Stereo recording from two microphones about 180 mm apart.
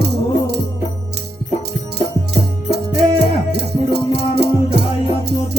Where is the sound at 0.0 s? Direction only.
65° right (ahead or behind).